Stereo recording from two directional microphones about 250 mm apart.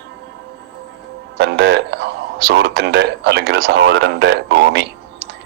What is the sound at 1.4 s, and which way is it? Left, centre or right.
A man's voice, right.